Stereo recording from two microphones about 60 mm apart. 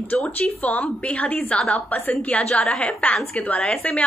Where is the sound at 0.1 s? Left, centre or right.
Left.